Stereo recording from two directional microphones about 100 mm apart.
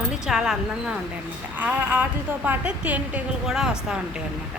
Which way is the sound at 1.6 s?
20° right (ahead or behind).